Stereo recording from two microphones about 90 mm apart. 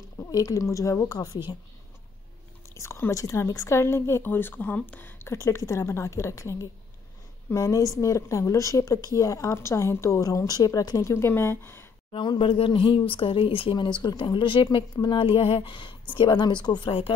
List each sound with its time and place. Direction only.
0.3 s a woman's voice: 40° left (ahead or behind)
2.7 s a woman's voice: 30° left (ahead or behind)
12.1 s speech: 75° left (ahead or behind)
13.1 s speech: 80° left; by 16.9 s 55° left (ahead or behind)